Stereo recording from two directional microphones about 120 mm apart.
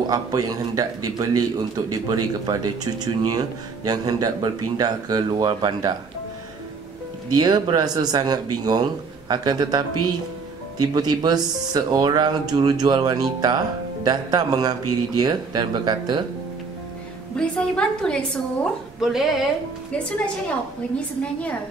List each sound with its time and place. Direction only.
0.0 s speech: 35° right (ahead or behind)
7.3 s speech: 35° right (ahead or behind)
17.4 s a woman's voice: 5° left (ahead or behind)
19.9 s a woman's voice: 10° left (ahead or behind)
21.2 s a woman's voice: 10° left (ahead or behind)